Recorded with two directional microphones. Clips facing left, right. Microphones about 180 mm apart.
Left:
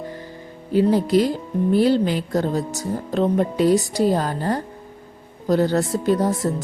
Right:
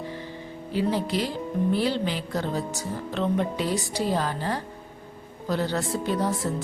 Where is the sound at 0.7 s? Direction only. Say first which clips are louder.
Left 9 dB; 45° left (ahead or behind).